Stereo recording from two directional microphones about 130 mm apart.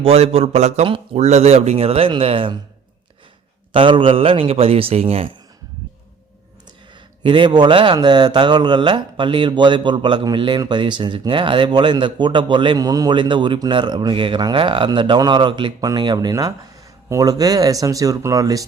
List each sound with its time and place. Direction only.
0.0 s a man's voice: 50° right (ahead or behind)
3.7 s a man's voice: 40° right (ahead or behind)
7.2 s speech: 35° right (ahead or behind)